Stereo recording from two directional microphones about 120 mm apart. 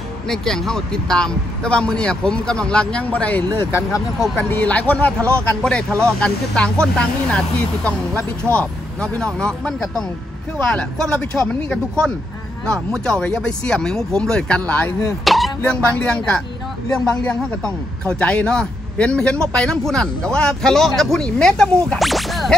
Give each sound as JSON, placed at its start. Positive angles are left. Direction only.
{"t": 0.3, "sound": "speech", "side_deg": 5}
{"t": 3.5, "sound": "speech", "side_deg": 20}
{"t": 13.0, "sound": "speech", "side_deg": 5}
{"t": 15.2, "sound": "a sound", "side_deg": 0}
{"t": 15.6, "sound": "speech", "side_deg": 10}